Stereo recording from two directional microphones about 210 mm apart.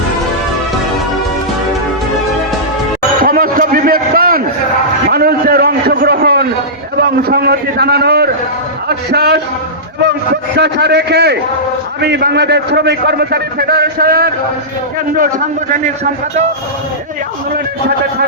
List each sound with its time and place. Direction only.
3.2 s a sound: 45° right (ahead or behind)
7.2 s a man's voice: 50° right (ahead or behind)
10.6 s a man's voice: 50° right (ahead or behind)